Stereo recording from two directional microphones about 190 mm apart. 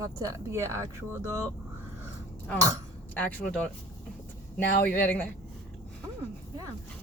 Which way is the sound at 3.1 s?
10° left (ahead or behind).